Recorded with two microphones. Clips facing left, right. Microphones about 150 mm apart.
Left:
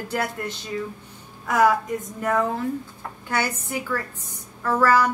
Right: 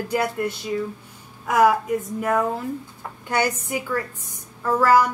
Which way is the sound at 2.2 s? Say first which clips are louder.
Left 2 dB; 10° right (ahead or behind).